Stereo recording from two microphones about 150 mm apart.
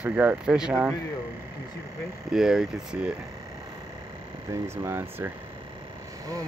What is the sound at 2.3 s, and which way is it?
Speech, 5° right (ahead or behind).